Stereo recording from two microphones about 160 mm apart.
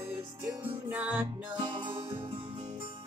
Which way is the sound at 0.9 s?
10° right (ahead or behind).